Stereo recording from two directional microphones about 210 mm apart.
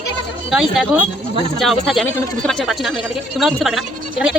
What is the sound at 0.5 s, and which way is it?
Speech, centre (ahead or behind).